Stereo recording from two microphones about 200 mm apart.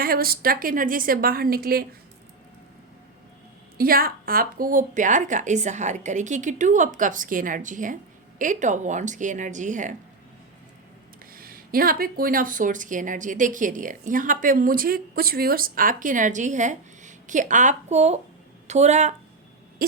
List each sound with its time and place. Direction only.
0.0 s a woman's voice: 50° right (ahead or behind)
3.8 s speech: 45° right (ahead or behind)
11.3 s speech: 45° right (ahead or behind)